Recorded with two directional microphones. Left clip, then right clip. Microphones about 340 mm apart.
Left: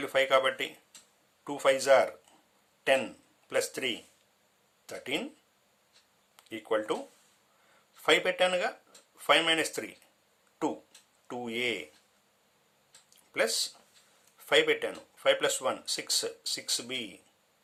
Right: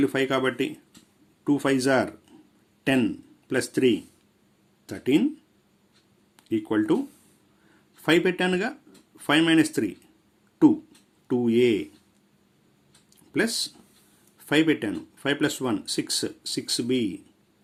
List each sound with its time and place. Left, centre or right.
0.0 s speech: centre
6.3 s speech: centre
8.0 s speech: centre
11.3 s speech: centre
13.3 s speech: centre